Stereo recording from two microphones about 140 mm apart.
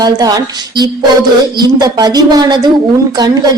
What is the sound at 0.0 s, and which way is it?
A woman's voice, 25° right (ahead or behind).